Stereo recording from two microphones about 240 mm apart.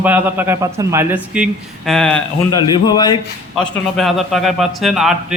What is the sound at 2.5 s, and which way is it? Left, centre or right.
Speech, centre.